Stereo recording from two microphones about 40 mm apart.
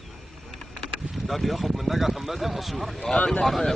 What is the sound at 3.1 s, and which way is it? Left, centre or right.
Speech, left.